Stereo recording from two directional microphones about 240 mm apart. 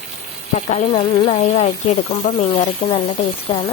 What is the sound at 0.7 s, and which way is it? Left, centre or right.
Speech, left.